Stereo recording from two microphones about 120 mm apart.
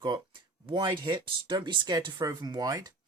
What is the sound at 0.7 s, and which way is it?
Speech, 40° right (ahead or behind).